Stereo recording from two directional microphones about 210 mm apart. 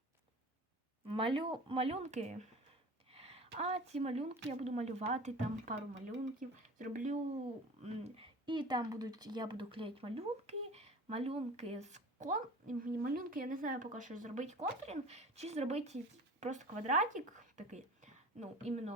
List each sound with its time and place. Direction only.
1.1 s speech: 25° right (ahead or behind)